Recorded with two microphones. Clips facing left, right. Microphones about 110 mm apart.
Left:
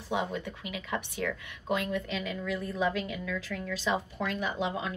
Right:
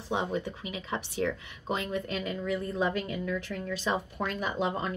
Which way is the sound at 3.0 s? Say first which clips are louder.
Right 2 dB; 45° right (ahead or behind).